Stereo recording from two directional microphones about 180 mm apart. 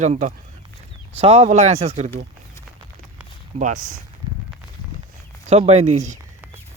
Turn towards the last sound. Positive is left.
turn(degrees=-40)  # may be behind; listen again after turning